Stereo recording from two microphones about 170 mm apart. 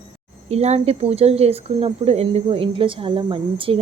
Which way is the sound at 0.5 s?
40° right (ahead or behind).